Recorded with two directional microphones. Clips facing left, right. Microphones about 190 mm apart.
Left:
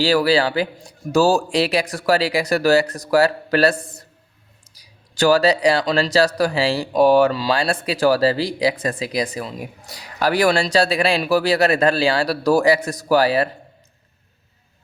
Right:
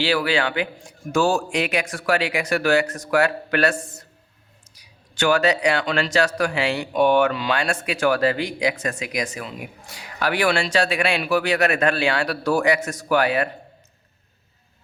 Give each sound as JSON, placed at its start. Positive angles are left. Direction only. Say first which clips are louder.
{"t": 0.0, "sound": "speech", "louder": "left 5 dB", "side_deg": 40}